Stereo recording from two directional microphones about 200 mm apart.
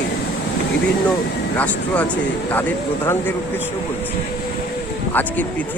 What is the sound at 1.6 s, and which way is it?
Speech, 5° left (ahead or behind).